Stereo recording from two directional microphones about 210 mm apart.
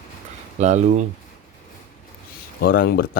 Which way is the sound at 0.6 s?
35° right (ahead or behind).